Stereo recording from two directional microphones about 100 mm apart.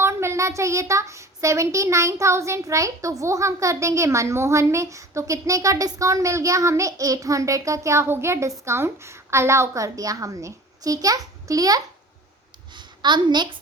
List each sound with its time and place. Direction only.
0.0 s a child's voice: 25° right (ahead or behind)
12.7 s a child's voice: 50° right (ahead or behind)